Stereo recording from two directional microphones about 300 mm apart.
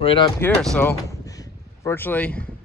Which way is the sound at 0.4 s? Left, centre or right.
Centre.